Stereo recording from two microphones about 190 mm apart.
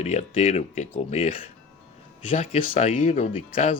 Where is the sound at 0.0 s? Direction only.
35° left (ahead or behind).